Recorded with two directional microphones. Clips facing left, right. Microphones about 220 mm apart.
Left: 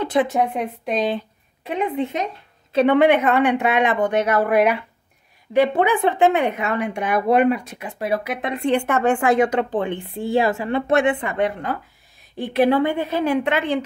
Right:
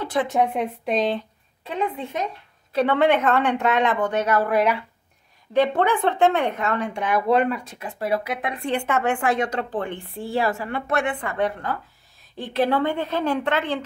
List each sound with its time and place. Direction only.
0.0 s speech: 20° left (ahead or behind)
0.3 s a woman's voice: centre (ahead or behind)
1.7 s a woman's voice: 20° left (ahead or behind)